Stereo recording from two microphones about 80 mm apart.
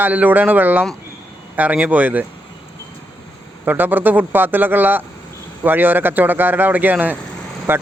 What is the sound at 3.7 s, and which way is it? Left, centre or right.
Speech, right.